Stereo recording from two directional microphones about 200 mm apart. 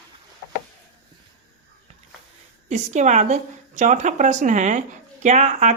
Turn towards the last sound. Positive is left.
turn(degrees=-35)  # may be behind; listen again after turning